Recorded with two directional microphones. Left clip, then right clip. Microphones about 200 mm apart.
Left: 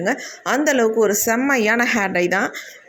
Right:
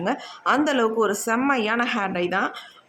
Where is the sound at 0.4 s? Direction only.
10° left (ahead or behind).